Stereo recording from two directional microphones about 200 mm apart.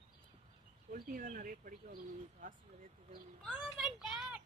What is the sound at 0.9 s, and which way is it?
Speech, 45° right (ahead or behind).